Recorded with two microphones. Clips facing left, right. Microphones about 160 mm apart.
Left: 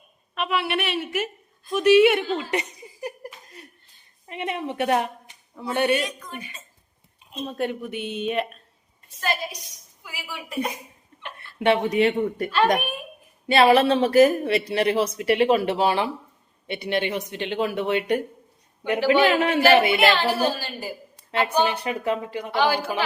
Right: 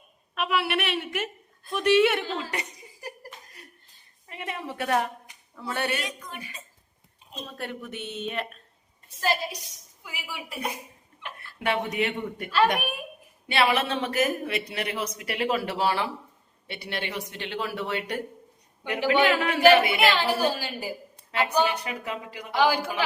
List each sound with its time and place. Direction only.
0.3 s a woman's voice: 5° right (ahead or behind)
2.5 s laughter: 20° left (ahead or behind)
3.6 s a sound: 25° left (ahead or behind)
4.3 s a woman's voice: 20° left (ahead or behind)
7.4 s speech: 20° left (ahead or behind)
9.2 s a woman's voice: 30° right (ahead or behind)
10.3 s a woman's voice: 5° right (ahead or behind)
11.6 s speech: 25° left (ahead or behind)
13.5 s speech: 40° left (ahead or behind); by 18.2 s 20° left (ahead or behind)
18.9 s a woman's voice: 20° right (ahead or behind)
19.3 s speech: 25° left (ahead or behind)
20.1 s a woman's voice: 10° right (ahead or behind)
21.3 s speech: 30° left (ahead or behind)
22.5 s a woman's voice: 10° right (ahead or behind)